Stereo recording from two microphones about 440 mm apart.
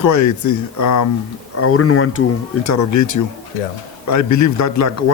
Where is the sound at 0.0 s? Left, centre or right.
Left.